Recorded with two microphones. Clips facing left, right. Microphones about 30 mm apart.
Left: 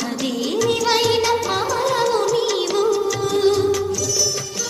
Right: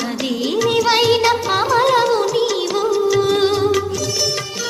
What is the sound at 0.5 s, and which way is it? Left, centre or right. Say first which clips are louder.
Music: right 3 dB; right.